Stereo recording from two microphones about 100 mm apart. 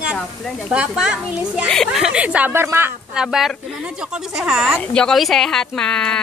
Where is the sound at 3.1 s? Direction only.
5° right (ahead or behind).